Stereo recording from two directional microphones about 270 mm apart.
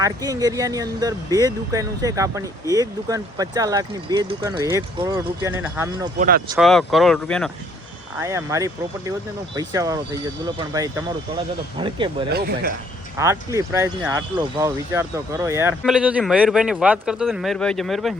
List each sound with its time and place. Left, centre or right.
0.0 s speech: centre
6.1 s speech: right
6.6 s speech: centre
8.2 s speech: centre
12.3 s speech: right
13.1 s speech: centre